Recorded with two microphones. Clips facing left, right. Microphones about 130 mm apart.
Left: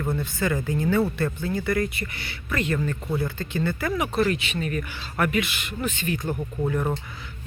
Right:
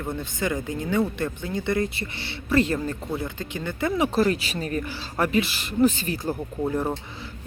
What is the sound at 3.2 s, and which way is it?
Speech, 15° right (ahead or behind).